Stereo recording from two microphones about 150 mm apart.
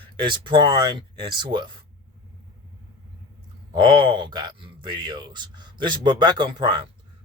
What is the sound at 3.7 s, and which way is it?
Speech, 35° right (ahead or behind).